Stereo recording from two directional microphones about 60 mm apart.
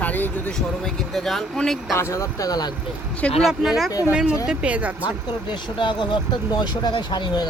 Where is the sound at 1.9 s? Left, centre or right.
Left.